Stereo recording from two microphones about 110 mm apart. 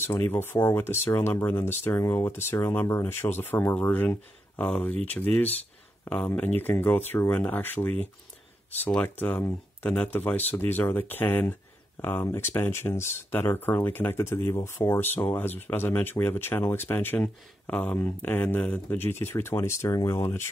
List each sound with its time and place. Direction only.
0.0 s speech: 20° left (ahead or behind)